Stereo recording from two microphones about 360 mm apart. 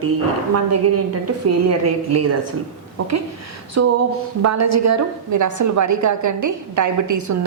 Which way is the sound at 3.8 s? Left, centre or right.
Right.